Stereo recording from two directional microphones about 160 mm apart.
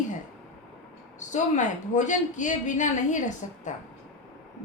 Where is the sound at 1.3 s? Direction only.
50° left (ahead or behind).